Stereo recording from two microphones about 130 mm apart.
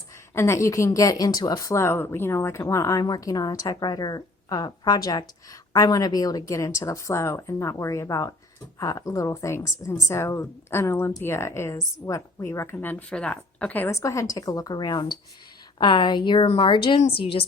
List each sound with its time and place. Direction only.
0.3 s a woman's voice: 20° left (ahead or behind); by 17.4 s 45° left (ahead or behind)